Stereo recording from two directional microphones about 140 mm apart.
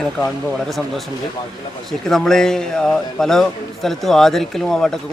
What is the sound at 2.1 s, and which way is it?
A man's voice, 5° left (ahead or behind).